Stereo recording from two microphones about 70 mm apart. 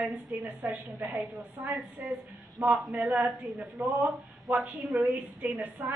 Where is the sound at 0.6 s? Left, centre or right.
Right.